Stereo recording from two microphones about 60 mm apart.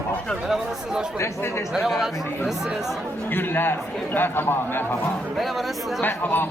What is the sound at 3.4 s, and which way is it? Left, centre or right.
A man's voice, left.